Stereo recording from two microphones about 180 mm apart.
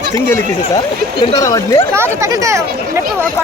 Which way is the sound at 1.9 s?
15° right (ahead or behind).